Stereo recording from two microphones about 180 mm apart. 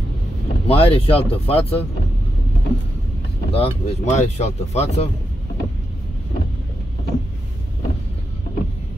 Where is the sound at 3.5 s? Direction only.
35° left (ahead or behind).